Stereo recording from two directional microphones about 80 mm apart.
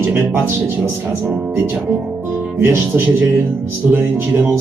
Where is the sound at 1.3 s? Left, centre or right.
Centre.